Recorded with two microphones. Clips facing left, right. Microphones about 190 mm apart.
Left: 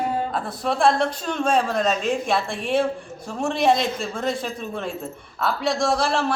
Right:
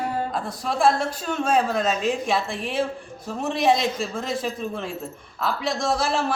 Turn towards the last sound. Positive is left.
turn(degrees=-5)  # may be behind; listen again after turning